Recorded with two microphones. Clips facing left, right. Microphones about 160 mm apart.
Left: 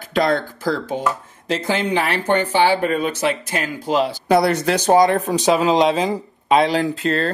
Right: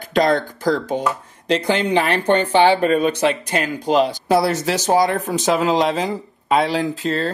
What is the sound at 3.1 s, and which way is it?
Speech, 10° left (ahead or behind).